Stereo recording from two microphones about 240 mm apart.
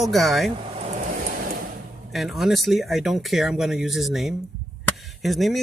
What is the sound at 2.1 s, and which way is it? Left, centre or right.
Speech, centre.